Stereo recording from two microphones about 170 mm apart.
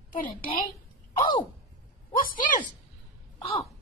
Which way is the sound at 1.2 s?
30° left (ahead or behind).